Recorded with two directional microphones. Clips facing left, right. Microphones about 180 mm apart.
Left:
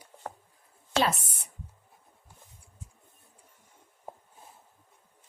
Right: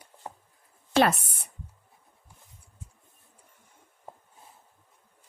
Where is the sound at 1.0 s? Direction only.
60° right (ahead or behind).